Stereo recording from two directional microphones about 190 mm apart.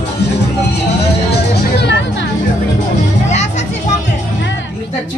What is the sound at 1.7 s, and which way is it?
Music, 65° left (ahead or behind).